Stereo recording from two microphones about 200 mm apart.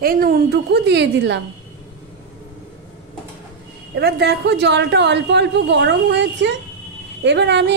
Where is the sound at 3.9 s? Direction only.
55° right (ahead or behind).